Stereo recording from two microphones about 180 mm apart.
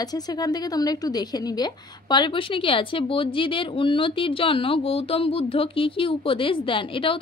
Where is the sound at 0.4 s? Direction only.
20° left (ahead or behind).